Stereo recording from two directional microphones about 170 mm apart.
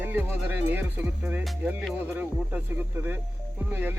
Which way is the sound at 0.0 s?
10° right (ahead or behind).